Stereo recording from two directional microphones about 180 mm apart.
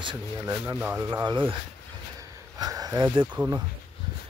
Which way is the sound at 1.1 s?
25° right (ahead or behind).